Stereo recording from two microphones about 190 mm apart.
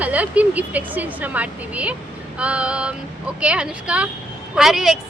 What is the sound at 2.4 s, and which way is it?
Child singing, 5° right (ahead or behind).